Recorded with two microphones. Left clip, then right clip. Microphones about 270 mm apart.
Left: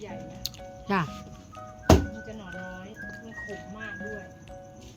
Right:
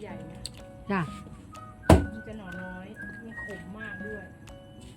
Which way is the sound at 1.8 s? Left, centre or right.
Centre.